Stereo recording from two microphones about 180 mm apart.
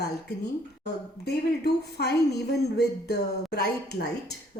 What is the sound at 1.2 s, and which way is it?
A woman's voice, 65° left (ahead or behind).